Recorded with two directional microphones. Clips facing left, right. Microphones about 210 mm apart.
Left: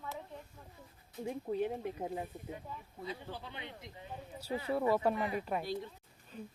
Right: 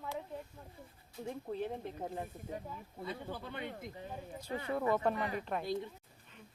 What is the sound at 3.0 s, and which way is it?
Speech, 50° right (ahead or behind).